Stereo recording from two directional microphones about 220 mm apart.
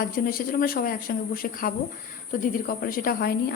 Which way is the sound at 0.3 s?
40° left (ahead or behind).